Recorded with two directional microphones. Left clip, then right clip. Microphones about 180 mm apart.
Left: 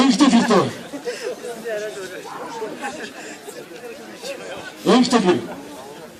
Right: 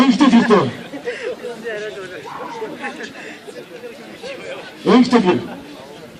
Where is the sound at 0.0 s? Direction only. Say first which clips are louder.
Right 2 dB; 40° left (ahead or behind).